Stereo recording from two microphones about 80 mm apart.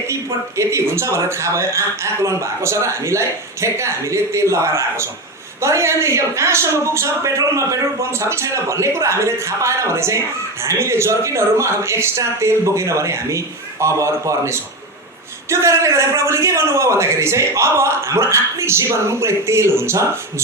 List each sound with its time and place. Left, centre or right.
0.1 s speech: right